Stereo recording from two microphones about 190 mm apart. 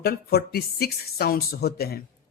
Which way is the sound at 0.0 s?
55° left (ahead or behind).